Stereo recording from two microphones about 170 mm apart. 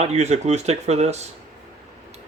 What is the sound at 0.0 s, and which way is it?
Speech, 40° right (ahead or behind).